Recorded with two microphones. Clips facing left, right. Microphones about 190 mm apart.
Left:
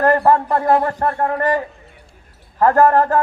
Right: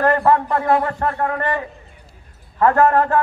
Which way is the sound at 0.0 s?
35° left (ahead or behind).